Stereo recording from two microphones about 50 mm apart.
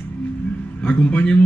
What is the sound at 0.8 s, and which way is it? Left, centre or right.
Speech, left.